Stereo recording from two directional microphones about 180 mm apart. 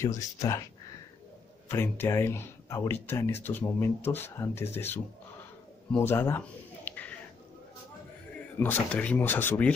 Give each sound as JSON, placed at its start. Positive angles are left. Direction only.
{"t": 0.0, "sound": "speech", "side_deg": 20}
{"t": 1.7, "sound": "speech", "side_deg": 15}
{"t": 5.9, "sound": "a sound", "side_deg": 10}
{"t": 8.5, "sound": "speech", "side_deg": 10}